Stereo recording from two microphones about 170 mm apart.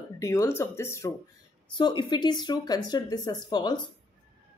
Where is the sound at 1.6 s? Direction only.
25° left (ahead or behind).